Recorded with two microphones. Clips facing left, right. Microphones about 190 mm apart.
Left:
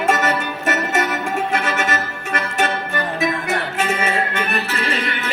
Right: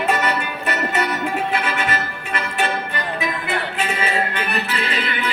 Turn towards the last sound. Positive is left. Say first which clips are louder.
# left 2 dB
turn(degrees=45)  # may be behind; listen again after turning